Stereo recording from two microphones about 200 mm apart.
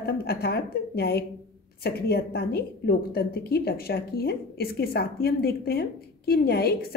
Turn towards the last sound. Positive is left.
turn(degrees=50)  # may be behind; listen again after turning